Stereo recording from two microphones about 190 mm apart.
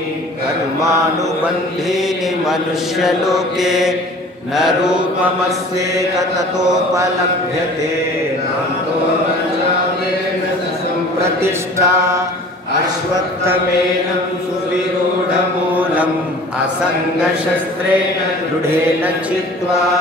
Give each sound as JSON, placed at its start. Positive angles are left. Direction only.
{"t": 2.4, "sound": "mantra", "side_deg": 0}
{"t": 5.9, "sound": "music", "side_deg": -15}
{"t": 11.2, "sound": "music", "side_deg": -15}
{"t": 15.7, "sound": "mantra", "side_deg": -10}